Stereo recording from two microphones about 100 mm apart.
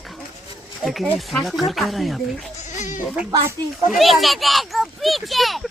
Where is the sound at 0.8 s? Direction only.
Centre (ahead or behind).